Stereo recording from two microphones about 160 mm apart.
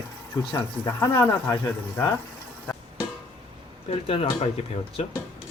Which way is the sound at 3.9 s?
40° left (ahead or behind).